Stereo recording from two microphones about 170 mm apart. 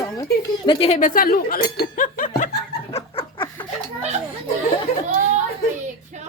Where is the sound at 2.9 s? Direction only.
35° left (ahead or behind).